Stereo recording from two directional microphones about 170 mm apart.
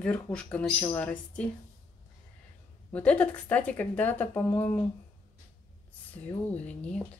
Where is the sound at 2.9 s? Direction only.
5° left (ahead or behind).